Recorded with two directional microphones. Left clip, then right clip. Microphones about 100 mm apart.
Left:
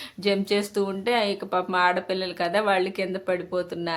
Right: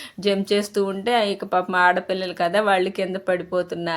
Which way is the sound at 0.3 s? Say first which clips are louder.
Right 3 dB; 30° right (ahead or behind).